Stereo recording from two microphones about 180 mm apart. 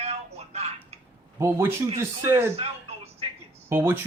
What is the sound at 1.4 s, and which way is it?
Speech, 15° right (ahead or behind).